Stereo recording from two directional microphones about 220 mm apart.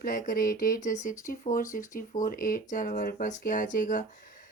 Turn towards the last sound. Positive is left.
turn(degrees=35)  # may be behind; listen again after turning